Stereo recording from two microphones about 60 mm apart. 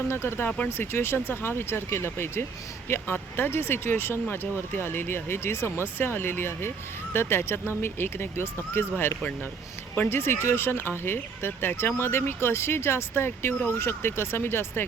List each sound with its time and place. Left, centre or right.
0.1 s speech: left